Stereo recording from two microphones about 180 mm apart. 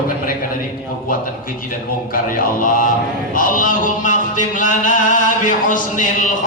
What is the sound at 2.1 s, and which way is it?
Music, 50° left (ahead or behind).